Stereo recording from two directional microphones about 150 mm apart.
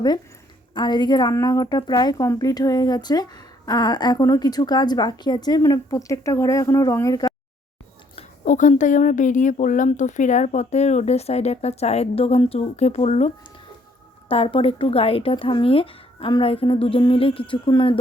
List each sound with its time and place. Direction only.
0.7 s a woman's voice: 30° left (ahead or behind)
8.4 s speech: 55° left (ahead or behind); by 17.9 s 35° left (ahead or behind)